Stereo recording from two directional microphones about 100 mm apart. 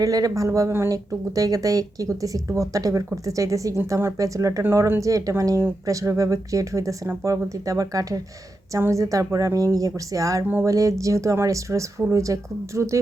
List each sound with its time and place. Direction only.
0.0 s speech: 35° right (ahead or behind)